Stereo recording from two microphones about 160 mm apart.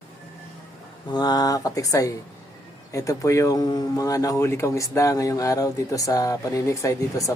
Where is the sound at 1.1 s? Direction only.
25° left (ahead or behind).